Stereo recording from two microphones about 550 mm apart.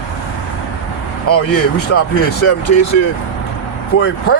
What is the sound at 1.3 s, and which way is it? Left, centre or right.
Speech, left.